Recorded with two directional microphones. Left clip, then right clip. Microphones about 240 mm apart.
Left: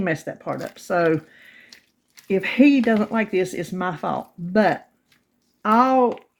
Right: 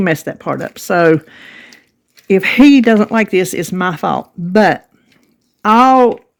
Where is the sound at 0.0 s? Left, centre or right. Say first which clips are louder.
Right 9 dB; right.